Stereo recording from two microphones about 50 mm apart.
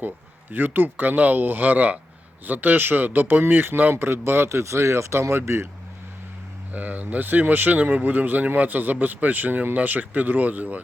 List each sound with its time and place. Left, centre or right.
0.5 s speech: right
3.9 s speech: right
6.7 s speech: right